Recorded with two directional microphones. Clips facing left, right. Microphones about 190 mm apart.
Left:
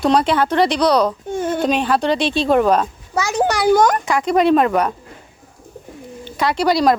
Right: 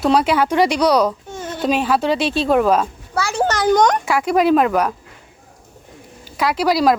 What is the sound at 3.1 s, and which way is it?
Speech, 15° left (ahead or behind).